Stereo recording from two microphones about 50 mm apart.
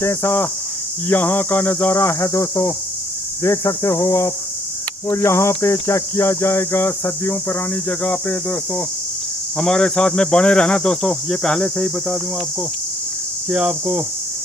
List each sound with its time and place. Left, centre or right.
0.0 s speech: left
1.0 s speech: left
2.0 s speech: left
8.0 s speech: left
9.6 s speech: centre
13.5 s speech: right